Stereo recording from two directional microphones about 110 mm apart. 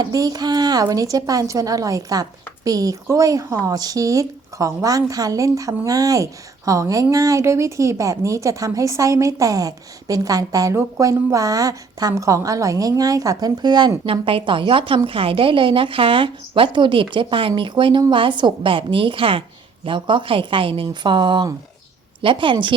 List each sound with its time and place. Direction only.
0.0 s a woman's voice: 35° right (ahead or behind)
14.0 s a woman's voice: 55° right (ahead or behind)